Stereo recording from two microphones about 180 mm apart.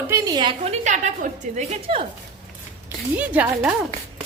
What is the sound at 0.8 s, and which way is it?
A woman's voice, 40° right (ahead or behind).